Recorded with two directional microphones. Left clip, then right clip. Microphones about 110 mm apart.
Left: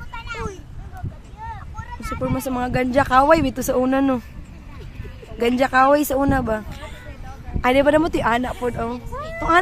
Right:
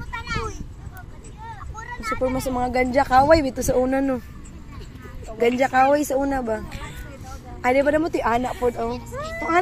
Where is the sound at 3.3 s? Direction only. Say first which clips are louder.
Even; 50° left (ahead or behind).